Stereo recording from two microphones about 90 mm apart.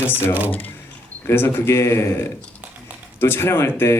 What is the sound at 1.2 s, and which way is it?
Speech, 25° left (ahead or behind).